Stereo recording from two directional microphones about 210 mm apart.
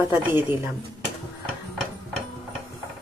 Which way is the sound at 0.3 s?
10° right (ahead or behind).